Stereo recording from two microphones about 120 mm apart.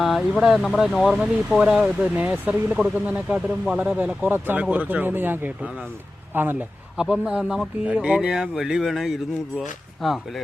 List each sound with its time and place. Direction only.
0.0 s speech: centre (ahead or behind); by 6.6 s 15° right (ahead or behind)
6.9 s speech: 5° right (ahead or behind)